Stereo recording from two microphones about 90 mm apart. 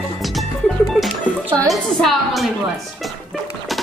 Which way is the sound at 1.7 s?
Centre (ahead or behind).